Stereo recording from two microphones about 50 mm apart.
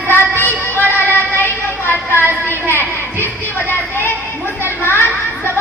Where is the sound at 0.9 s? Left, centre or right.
Left.